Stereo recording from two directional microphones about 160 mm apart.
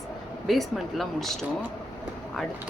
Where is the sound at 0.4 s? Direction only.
Centre (ahead or behind).